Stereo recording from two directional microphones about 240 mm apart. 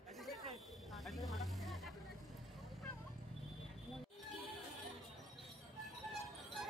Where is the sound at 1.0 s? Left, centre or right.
Centre.